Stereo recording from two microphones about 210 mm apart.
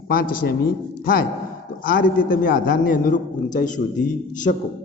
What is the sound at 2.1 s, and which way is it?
A man's voice, 40° left (ahead or behind).